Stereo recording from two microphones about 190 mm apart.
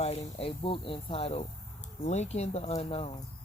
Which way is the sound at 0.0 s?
30° left (ahead or behind).